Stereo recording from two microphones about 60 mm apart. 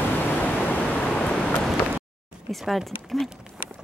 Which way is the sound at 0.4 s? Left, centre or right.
Left.